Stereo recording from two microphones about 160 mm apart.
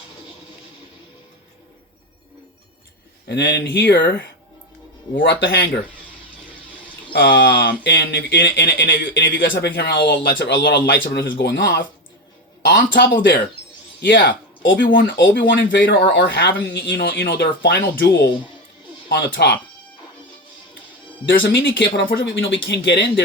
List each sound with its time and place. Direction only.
3.2 s speech: 90° left
7.1 s speech: 90° left; by 13.1 s 70° left (ahead or behind)
14.1 s speech: 90° left
14.8 s speech: 75° left (ahead or behind); by 19.5 s 90° left
21.6 s speech: 90° left